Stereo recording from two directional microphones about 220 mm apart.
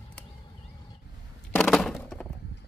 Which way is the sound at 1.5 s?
Centre (ahead or behind).